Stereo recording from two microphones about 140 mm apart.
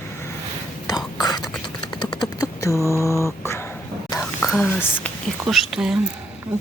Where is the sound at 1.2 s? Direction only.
30° left (ahead or behind).